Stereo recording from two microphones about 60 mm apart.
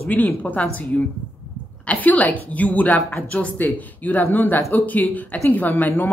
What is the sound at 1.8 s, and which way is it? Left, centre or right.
Speech, left.